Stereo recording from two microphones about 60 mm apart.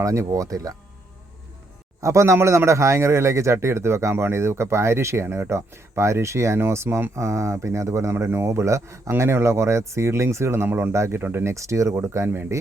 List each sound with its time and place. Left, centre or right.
0.0 s speech: right
2.0 s speech: right
8.1 s speech: right
11.5 s speech: right